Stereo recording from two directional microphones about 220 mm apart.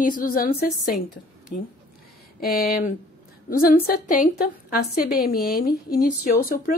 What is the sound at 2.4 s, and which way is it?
A woman's voice, 40° left (ahead or behind).